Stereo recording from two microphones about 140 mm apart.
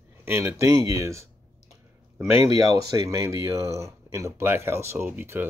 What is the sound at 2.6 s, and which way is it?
Speech, 30° right (ahead or behind).